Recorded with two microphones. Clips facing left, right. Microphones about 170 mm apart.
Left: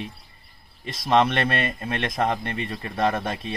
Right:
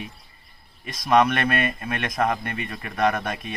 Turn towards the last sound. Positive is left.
turn(degrees=30)  # may be behind; listen again after turning